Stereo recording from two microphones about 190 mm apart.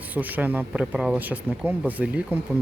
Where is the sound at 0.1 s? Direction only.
10° right (ahead or behind).